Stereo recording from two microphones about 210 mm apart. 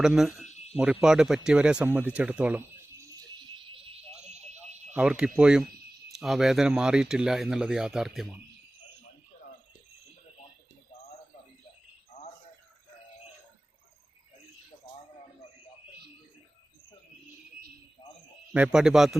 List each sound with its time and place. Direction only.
0.0 s speech: centre (ahead or behind)
0.4 s a sound: 30° left (ahead or behind)
1.0 s speech: 5° right (ahead or behind)
3.8 s alarm: 30° right (ahead or behind)
4.9 s speech: 5° right (ahead or behind)
12.1 s a sound: 30° left (ahead or behind)
18.5 s speech: 5° right (ahead or behind)